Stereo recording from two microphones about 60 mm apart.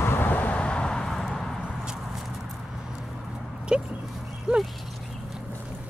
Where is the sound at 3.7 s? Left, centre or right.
Centre.